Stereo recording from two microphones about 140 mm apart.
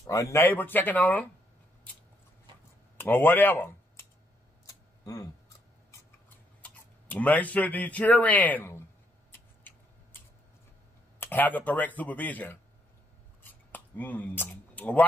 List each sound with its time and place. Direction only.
0.0 s speech: 20° left (ahead or behind)
3.0 s speech: 15° left (ahead or behind)
4.6 s a sound: 25° left (ahead or behind)
6.6 s speech: 10° left (ahead or behind)
11.1 s speech: 10° left (ahead or behind)
13.4 s a sound: 15° left (ahead or behind)